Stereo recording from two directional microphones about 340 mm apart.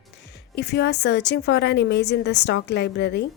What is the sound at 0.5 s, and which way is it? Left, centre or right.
A woman's voice, left.